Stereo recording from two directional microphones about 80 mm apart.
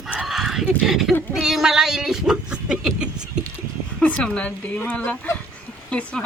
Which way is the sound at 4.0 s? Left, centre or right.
Centre.